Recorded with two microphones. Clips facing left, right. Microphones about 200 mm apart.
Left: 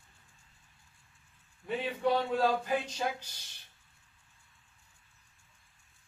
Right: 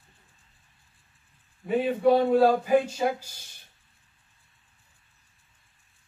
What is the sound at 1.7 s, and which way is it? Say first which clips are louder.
Speech: right 9 dB; 50° right (ahead or behind).